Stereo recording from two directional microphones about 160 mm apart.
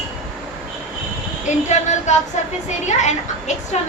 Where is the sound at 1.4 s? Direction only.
45° left (ahead or behind).